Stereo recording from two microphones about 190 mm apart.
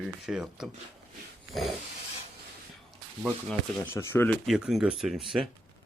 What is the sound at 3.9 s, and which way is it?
Speech, 10° left (ahead or behind).